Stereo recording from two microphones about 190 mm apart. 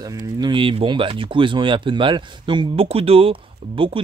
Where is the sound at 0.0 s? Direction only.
20° right (ahead or behind).